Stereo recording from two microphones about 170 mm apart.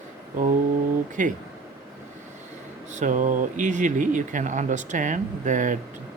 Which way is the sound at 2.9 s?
45° right (ahead or behind).